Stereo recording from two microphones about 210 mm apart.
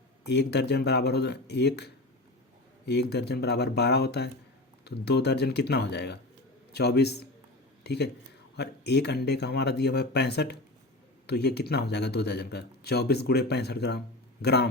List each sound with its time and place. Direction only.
0.3 s speech: 50° left (ahead or behind)